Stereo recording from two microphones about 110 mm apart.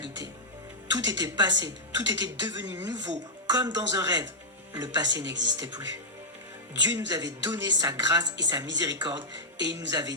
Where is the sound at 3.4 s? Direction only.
40° right (ahead or behind).